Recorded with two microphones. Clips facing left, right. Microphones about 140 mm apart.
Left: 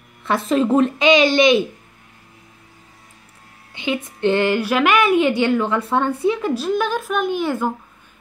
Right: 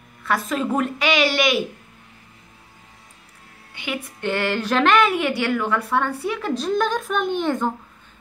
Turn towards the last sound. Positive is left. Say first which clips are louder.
# left 1 dB
turn(degrees=5)  # may be behind; listen again after turning